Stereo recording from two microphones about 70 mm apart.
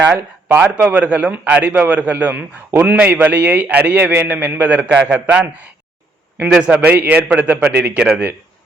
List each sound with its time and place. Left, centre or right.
0.0 s a man's voice: right
6.7 s a man's voice: right